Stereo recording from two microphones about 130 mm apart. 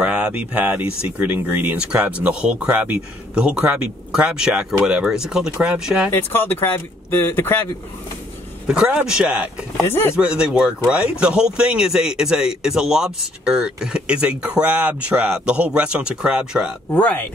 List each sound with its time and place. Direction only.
0.0 s speech: 10° right (ahead or behind)
6.1 s speech: 15° left (ahead or behind)
8.6 s speech: 5° right (ahead or behind)
9.8 s speech: 20° left (ahead or behind)
10.1 s speech: 10° right (ahead or behind)
16.9 s speech: 15° left (ahead or behind)